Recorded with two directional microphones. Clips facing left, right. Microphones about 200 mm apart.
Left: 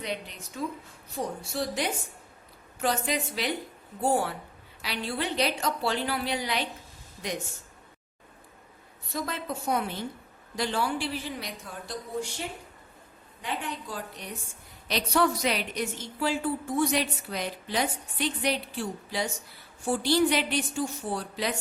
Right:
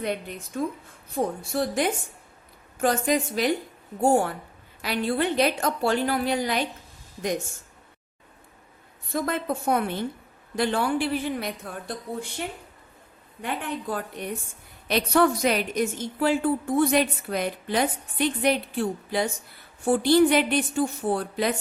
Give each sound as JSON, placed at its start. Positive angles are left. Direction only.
{"t": 0.0, "sound": "a woman's voice", "side_deg": -50}
{"t": 9.1, "sound": "a woman's voice", "side_deg": -55}
{"t": 13.4, "sound": "a woman's voice", "side_deg": -55}